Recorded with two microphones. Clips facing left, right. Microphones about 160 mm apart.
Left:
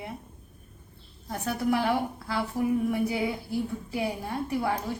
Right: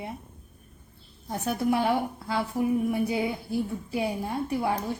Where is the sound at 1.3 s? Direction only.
20° right (ahead or behind).